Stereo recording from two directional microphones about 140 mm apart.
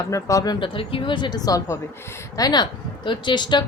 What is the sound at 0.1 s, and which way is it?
Speech, 25° left (ahead or behind).